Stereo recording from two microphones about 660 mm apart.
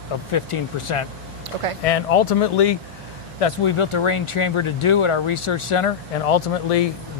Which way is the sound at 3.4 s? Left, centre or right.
Left.